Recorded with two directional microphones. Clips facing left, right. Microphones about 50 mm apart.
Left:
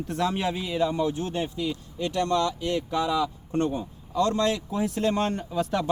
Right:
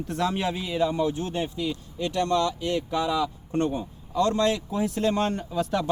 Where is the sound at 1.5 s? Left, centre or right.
Centre.